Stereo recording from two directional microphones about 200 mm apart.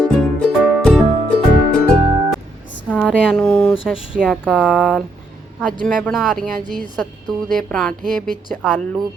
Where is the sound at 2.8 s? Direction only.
5° left (ahead or behind).